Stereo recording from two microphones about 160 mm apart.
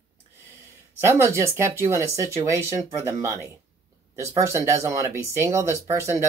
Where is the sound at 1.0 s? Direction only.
15° right (ahead or behind).